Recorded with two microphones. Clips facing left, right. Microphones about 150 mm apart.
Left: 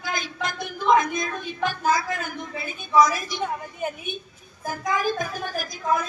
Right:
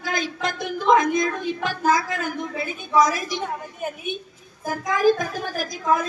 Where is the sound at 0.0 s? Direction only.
90° right.